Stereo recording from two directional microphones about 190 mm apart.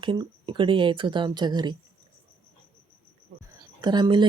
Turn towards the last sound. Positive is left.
turn(degrees=-25)  # may be behind; listen again after turning